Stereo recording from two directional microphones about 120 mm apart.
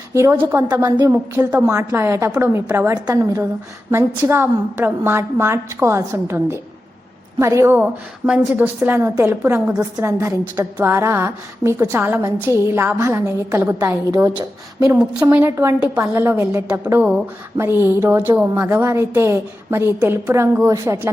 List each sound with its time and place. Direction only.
0.1 s a woman's voice: 20° right (ahead or behind)
0.9 s a woman's voice: 35° right (ahead or behind)
1.1 s a woman's voice: 15° right (ahead or behind)
2.9 s a woman's voice: 30° right (ahead or behind)
13.7 s a woman's voice: 30° right (ahead or behind)
15.3 s a woman's voice: 20° right (ahead or behind)